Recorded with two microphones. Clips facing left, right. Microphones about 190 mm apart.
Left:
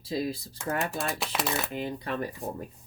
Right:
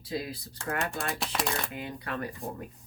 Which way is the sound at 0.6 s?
5° left (ahead or behind).